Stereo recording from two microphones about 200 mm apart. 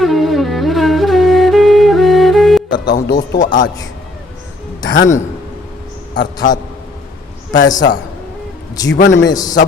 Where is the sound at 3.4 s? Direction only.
40° left (ahead or behind).